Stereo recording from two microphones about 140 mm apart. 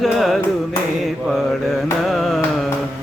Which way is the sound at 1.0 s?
Centre (ahead or behind).